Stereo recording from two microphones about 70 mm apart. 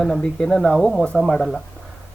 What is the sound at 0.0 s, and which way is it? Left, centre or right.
Speech, centre.